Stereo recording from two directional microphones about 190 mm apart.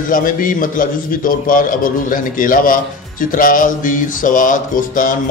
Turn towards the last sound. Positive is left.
turn(degrees=45)  # may be behind; listen again after turning